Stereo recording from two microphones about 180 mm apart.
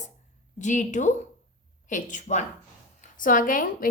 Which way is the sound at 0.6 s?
45° left (ahead or behind).